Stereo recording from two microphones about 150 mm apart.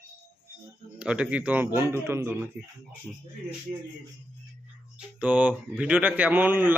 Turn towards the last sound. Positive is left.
turn(degrees=-10)  # may be behind; listen again after turning